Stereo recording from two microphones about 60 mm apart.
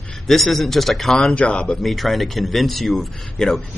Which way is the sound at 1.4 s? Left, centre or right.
Centre.